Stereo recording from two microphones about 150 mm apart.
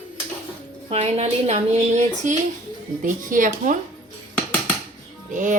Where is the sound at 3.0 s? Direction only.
60° right (ahead or behind).